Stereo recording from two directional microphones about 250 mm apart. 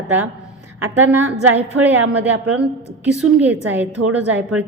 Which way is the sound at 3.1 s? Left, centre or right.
Centre.